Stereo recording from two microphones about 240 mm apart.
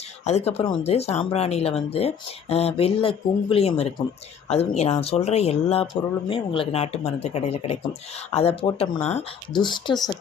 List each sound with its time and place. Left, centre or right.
0.3 s speech: left